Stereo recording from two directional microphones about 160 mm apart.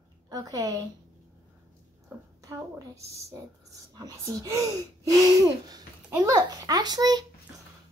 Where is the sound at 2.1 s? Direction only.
15° right (ahead or behind).